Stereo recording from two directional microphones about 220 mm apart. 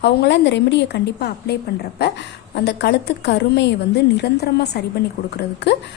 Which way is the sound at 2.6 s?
50° left (ahead or behind).